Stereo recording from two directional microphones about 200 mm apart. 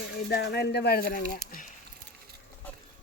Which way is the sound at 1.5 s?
40° left (ahead or behind).